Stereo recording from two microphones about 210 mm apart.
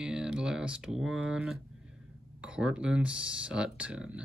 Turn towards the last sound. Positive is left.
turn(degrees=-5)  # may be behind; listen again after turning